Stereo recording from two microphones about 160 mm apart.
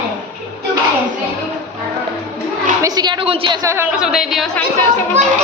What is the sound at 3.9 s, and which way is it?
Speech, 5° right (ahead or behind).